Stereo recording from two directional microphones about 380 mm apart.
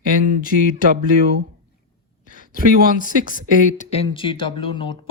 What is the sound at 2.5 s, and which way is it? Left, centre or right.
Speech, left.